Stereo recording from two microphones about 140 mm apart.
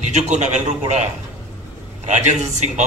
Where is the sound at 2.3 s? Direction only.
55° right (ahead or behind).